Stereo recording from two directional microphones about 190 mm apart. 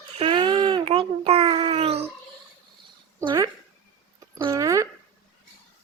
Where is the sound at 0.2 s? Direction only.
25° right (ahead or behind).